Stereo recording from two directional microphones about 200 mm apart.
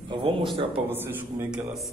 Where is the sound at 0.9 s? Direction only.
10° right (ahead or behind).